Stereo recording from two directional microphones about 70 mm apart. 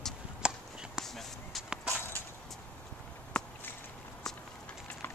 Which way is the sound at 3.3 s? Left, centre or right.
Centre.